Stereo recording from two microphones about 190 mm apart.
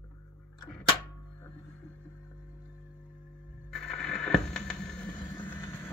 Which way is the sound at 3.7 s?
Centre (ahead or behind).